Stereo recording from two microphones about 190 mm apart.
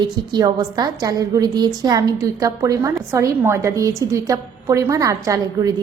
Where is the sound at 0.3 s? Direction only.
20° right (ahead or behind).